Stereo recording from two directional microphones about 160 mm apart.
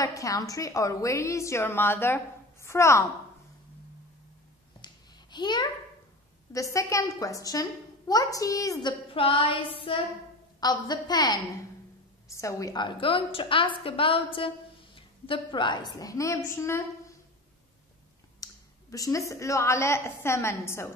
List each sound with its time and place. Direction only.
0.0 s a woman's voice: 20° left (ahead or behind)
4.8 s a sound: 25° left (ahead or behind)
6.5 s a woman's voice: 20° left (ahead or behind)
18.4 s a woman's voice: 20° left (ahead or behind)